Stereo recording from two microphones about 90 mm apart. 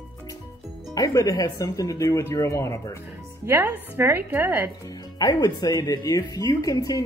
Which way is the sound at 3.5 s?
25° right (ahead or behind).